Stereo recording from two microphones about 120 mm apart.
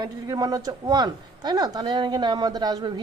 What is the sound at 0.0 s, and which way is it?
Speech, 30° right (ahead or behind).